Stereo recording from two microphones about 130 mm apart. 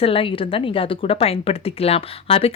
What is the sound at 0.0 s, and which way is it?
Speech, 45° left (ahead or behind).